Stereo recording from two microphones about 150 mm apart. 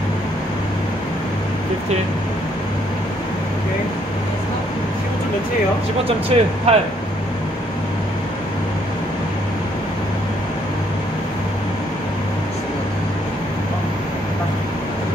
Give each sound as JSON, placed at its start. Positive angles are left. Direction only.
{"t": 6.0, "sound": "speech", "side_deg": -40}